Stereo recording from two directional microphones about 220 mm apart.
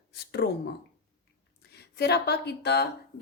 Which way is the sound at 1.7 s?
50° left (ahead or behind).